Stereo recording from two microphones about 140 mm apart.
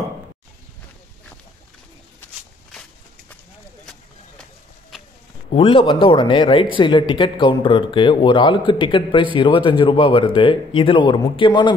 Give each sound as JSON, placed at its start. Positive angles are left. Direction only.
{"t": 5.5, "sound": "a man's voice", "side_deg": 40}